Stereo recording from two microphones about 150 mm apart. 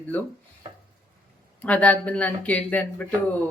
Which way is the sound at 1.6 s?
10° left (ahead or behind).